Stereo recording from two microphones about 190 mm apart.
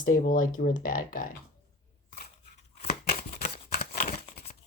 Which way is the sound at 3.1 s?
45° left (ahead or behind).